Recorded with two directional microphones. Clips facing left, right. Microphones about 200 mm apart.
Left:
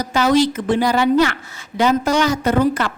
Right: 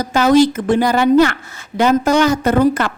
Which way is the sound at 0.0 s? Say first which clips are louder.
Right 4 dB; 50° right (ahead or behind).